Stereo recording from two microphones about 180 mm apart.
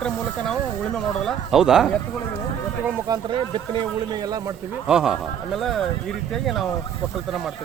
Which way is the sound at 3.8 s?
25° right (ahead or behind).